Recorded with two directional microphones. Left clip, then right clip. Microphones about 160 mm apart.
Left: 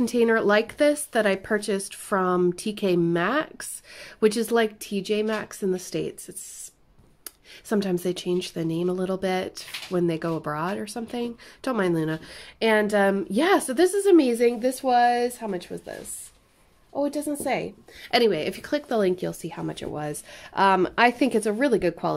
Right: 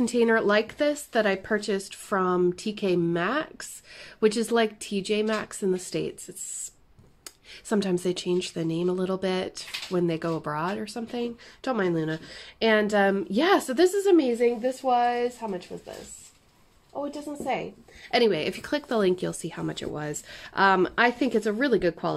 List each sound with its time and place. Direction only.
0.0 s speech: 10° left (ahead or behind)
7.6 s speech: 5° left (ahead or behind)
14.1 s speech: 30° left (ahead or behind)
16.9 s a woman's voice: 45° left (ahead or behind)
18.1 s speech: 10° left (ahead or behind)